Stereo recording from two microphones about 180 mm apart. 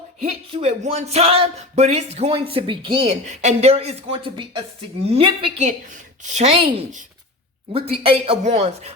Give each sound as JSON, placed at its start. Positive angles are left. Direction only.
{"t": 0.5, "sound": "speech", "side_deg": -35}